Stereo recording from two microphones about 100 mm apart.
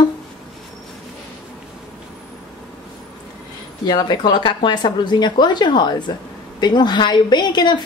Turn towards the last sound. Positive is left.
turn(degrees=50)  # may be behind; listen again after turning